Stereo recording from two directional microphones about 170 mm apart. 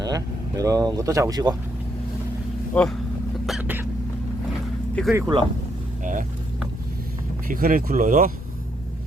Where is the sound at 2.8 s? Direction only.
5° left (ahead or behind).